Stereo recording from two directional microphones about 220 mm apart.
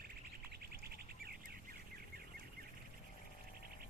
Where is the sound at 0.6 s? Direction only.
45° right (ahead or behind).